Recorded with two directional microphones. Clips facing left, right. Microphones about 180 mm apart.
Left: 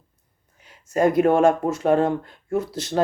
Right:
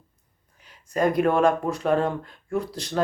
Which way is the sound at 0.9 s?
25° left (ahead or behind).